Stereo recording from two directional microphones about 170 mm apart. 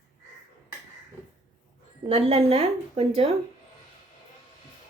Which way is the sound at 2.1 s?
35° right (ahead or behind).